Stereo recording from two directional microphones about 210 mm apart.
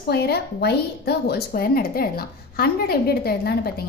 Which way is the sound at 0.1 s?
50° left (ahead or behind).